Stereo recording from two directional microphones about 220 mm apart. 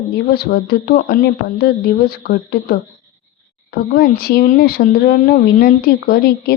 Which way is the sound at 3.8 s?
45° left (ahead or behind).